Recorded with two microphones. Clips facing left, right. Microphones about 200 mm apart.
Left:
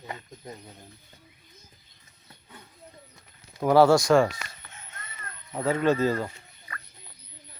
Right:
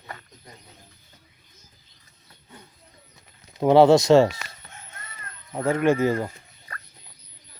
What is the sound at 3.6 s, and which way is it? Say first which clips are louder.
Speech: right 4 dB; 20° right (ahead or behind).